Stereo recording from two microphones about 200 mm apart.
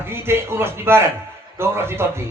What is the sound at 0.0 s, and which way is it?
A man's voice, 10° right (ahead or behind).